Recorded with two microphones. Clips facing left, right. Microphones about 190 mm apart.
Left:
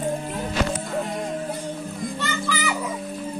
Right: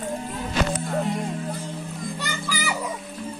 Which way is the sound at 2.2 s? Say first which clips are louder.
Left 5 dB; 10° right (ahead or behind).